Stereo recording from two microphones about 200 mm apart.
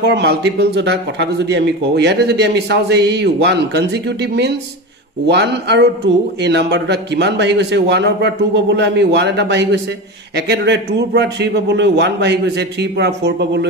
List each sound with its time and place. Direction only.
0.0 s speech: 60° right (ahead or behind)